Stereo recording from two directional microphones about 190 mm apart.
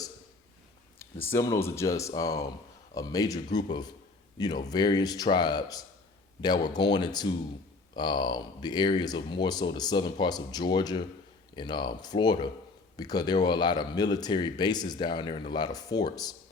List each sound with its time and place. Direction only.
0.9 s speech: 10° left (ahead or behind)